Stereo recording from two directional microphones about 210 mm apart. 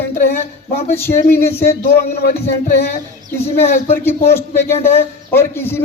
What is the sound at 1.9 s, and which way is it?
Speech, 45° left (ahead or behind).